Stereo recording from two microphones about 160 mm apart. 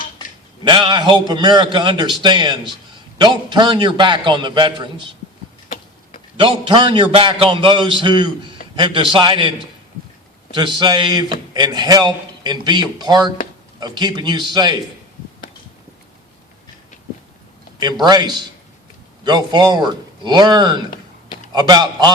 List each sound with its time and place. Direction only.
0.6 s a man's voice: 30° right (ahead or behind)
5.6 s a sound: 55° left (ahead or behind)
6.3 s a man's voice: 30° right (ahead or behind)
10.5 s a man's voice: 30° right (ahead or behind)
18.0 s a man's voice: 25° right (ahead or behind)